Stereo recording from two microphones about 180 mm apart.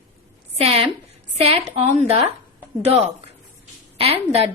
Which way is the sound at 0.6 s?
35° right (ahead or behind).